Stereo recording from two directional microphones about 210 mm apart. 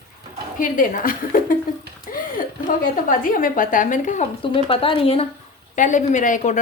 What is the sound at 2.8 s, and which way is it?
A woman's voice, 40° left (ahead or behind).